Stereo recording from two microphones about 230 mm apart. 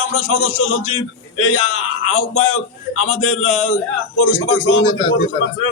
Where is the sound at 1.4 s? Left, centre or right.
Left.